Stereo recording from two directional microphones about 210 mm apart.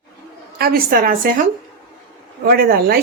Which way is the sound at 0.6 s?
45° right (ahead or behind).